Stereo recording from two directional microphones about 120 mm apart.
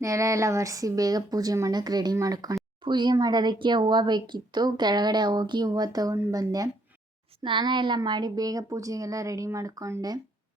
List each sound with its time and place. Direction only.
0.0 s speech: 25° right (ahead or behind)
2.8 s speech: 40° right (ahead or behind)
7.4 s speech: 40° right (ahead or behind)